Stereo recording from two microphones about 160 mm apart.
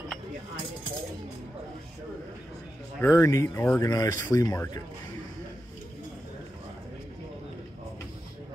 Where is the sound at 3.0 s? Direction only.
20° left (ahead or behind).